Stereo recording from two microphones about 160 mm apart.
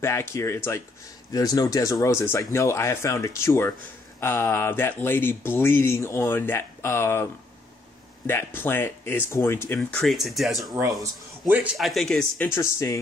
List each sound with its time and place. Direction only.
0.0 s speech: 15° left (ahead or behind)
8.5 s speech: 15° left (ahead or behind)
9.8 s speech: 5° left (ahead or behind)
12.5 s speech: 15° left (ahead or behind)